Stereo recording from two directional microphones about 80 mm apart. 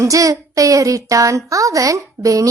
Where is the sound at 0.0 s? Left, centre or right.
Right.